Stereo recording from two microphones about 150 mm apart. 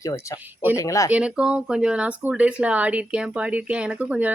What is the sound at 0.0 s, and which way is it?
Speech, 20° left (ahead or behind).